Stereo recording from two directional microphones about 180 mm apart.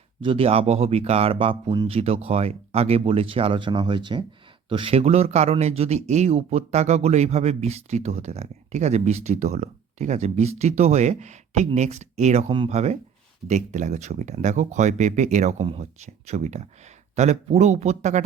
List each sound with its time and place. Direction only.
0.2 s speech: 30° right (ahead or behind)